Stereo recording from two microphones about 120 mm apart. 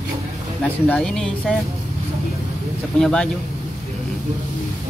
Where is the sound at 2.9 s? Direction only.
5° left (ahead or behind).